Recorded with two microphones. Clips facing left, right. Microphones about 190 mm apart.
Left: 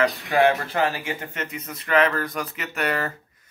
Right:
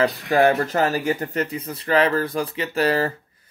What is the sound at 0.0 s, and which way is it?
Speech, 40° right (ahead or behind).